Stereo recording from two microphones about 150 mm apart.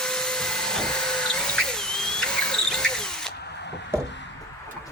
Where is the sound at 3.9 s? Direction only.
15° right (ahead or behind).